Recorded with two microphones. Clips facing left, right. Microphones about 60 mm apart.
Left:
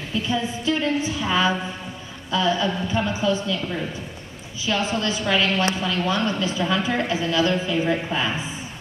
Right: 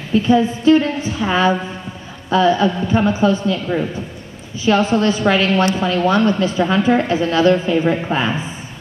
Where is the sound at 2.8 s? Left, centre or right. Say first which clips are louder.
Right 8 dB; right.